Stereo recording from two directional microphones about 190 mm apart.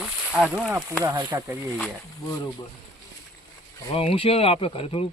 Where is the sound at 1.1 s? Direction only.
25° right (ahead or behind).